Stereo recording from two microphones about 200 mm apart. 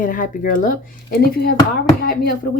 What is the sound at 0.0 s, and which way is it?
Speech, 45° left (ahead or behind).